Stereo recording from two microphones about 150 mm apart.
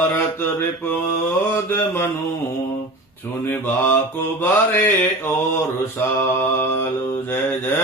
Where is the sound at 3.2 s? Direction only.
15° left (ahead or behind).